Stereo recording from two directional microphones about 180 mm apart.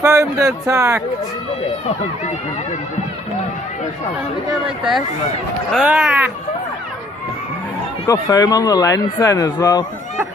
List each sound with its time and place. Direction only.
0.0 s a man's voice: 15° right (ahead or behind)
5.7 s a man's voice: 5° right (ahead or behind)
8.0 s speech: 20° left (ahead or behind)